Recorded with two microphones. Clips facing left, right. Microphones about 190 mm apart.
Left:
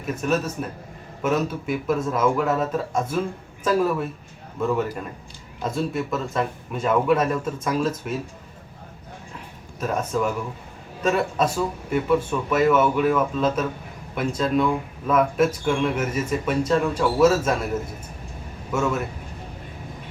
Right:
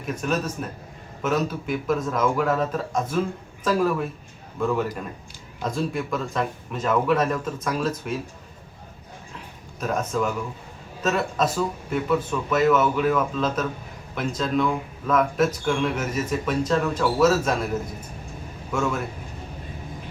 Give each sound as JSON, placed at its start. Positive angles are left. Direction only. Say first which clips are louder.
{"t": 0.0, "sound": "speech", "louder": "left 2 dB", "side_deg": 5}
{"t": 9.8, "sound": "speech", "louder": "left 1 dB", "side_deg": 10}